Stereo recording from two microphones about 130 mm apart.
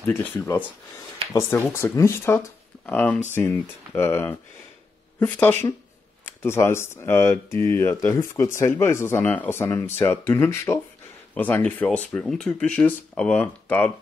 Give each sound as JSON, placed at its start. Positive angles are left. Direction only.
{"t": 0.0, "sound": "speech", "side_deg": 15}